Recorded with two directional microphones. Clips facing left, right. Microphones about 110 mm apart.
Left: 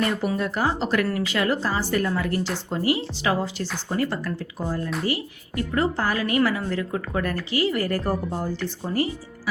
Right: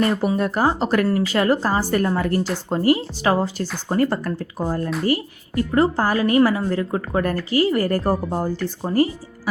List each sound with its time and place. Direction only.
0.3 s a woman's voice: 45° right (ahead or behind)